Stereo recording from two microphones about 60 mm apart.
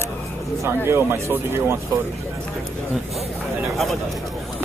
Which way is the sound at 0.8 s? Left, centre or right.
Right.